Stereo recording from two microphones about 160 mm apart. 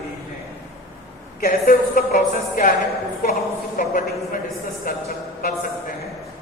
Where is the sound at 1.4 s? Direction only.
65° left (ahead or behind).